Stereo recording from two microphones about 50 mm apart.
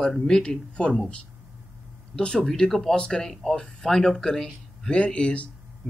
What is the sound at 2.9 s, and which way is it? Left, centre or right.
Speech, centre.